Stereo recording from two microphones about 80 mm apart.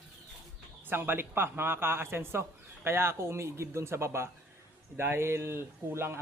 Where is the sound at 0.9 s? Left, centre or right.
Right.